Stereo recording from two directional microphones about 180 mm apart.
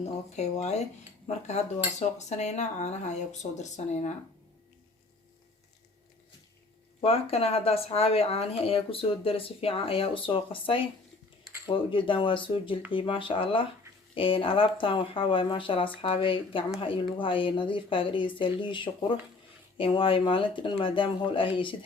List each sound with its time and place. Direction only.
0.3 s speech: 40° left (ahead or behind)
7.0 s speech: 35° left (ahead or behind)